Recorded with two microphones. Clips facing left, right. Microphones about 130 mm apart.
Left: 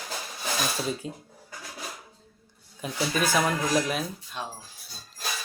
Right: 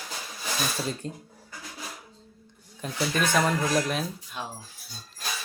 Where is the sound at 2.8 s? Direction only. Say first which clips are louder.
Even; 5° left (ahead or behind).